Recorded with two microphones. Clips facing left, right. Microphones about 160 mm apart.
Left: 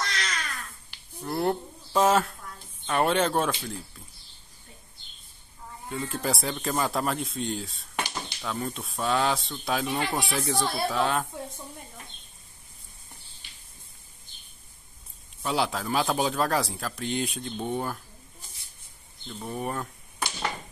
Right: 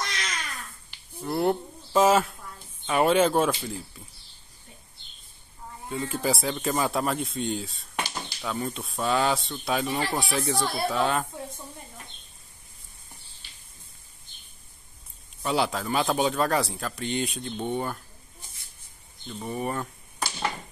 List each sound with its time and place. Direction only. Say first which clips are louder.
1.2 s a sound: right 2 dB; centre (ahead or behind)
2.9 s speech: right 3 dB; centre (ahead or behind)
5.9 s speech: right 2 dB; centre (ahead or behind)
15.4 s speech: right 1 dB; centre (ahead or behind)
19.2 s speech: right 2 dB; centre (ahead or behind)